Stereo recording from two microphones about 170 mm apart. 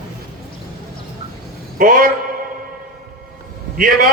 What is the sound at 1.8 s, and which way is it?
Speech, 55° right (ahead or behind).